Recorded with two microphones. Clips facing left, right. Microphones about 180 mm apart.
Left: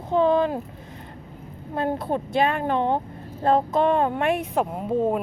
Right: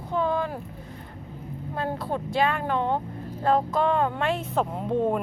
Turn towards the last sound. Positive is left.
turn(degrees=5)  # may be behind; listen again after turning